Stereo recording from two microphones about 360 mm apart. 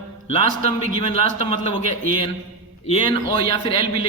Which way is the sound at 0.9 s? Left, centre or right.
Centre.